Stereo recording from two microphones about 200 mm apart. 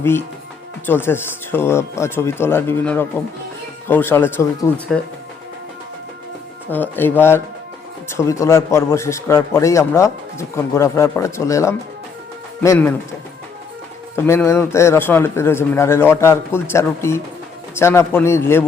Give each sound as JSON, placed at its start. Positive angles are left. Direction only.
{"t": 0.0, "sound": "a man's voice", "side_deg": 10}
{"t": 6.7, "sound": "a man's voice", "side_deg": 10}
{"t": 14.2, "sound": "a man's voice", "side_deg": 10}